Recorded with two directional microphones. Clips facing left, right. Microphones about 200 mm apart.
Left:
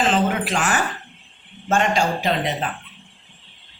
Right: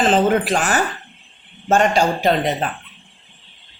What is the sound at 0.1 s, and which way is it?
Speech, 40° right (ahead or behind).